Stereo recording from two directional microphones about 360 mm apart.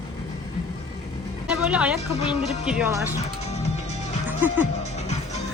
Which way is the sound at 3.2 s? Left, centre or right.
Centre.